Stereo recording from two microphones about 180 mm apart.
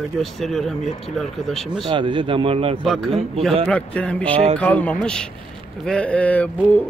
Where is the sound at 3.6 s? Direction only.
5° left (ahead or behind).